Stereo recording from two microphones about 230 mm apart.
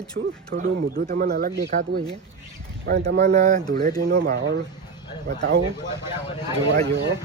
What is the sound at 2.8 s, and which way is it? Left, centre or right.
Speech, right.